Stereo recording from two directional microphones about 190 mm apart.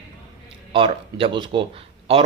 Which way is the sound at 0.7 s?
25° right (ahead or behind).